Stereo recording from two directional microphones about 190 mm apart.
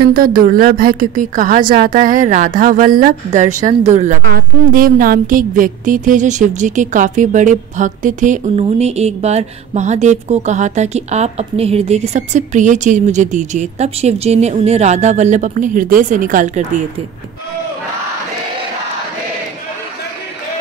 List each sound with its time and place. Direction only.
0.1 s a woman's voice: 50° right (ahead or behind)
4.2 s a woman's voice: 50° right (ahead or behind)